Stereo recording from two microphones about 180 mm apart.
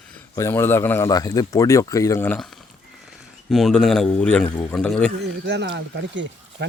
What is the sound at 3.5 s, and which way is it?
Speech, centre (ahead or behind).